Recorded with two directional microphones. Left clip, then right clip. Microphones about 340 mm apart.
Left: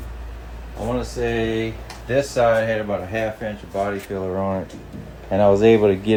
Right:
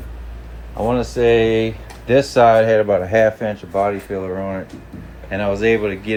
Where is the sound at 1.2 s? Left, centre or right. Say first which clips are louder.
Right 10 dB; centre.